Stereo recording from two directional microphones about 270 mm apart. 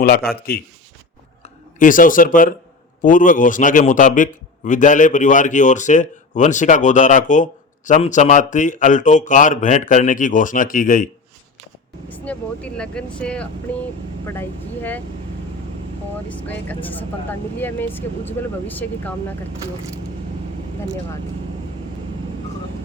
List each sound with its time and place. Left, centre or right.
0.0 s a man's voice: left
12.0 s speech: centre
16.3 s speech: centre